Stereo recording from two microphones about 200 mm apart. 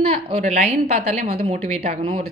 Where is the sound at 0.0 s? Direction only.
30° right (ahead or behind).